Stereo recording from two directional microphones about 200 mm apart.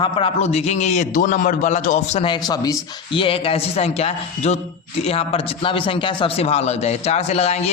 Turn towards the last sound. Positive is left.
turn(degrees=30)  # may be behind; listen again after turning